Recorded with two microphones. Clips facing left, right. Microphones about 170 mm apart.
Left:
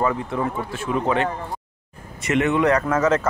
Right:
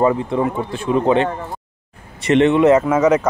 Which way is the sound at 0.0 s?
25° right (ahead or behind).